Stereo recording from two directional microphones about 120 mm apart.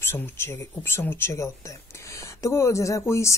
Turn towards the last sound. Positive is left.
turn(degrees=25)  # may be behind; listen again after turning